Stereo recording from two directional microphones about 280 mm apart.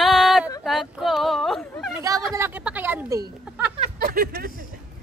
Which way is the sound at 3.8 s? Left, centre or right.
Right.